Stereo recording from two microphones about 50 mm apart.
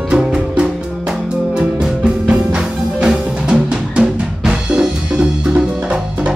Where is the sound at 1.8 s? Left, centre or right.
Centre.